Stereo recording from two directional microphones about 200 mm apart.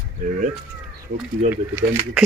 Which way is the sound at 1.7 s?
10° right (ahead or behind).